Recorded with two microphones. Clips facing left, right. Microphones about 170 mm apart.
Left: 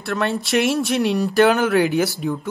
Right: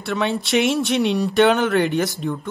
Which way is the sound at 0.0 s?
Centre (ahead or behind).